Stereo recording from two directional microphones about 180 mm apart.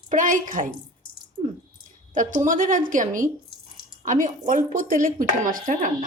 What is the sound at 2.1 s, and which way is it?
A woman's voice, 45° right (ahead or behind).